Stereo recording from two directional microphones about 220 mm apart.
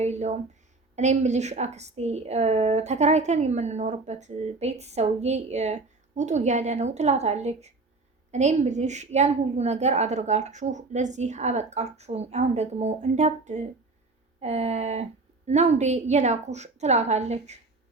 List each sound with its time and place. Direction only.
0.0 s a woman's voice: 30° right (ahead or behind)
14.4 s a sound: 30° right (ahead or behind)
15.4 s a woman's voice: 30° right (ahead or behind)